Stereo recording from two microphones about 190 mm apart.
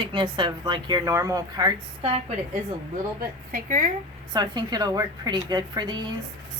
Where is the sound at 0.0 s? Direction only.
25° right (ahead or behind).